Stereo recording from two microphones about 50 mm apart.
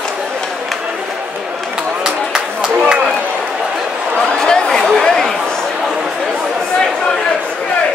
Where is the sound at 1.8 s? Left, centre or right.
Centre.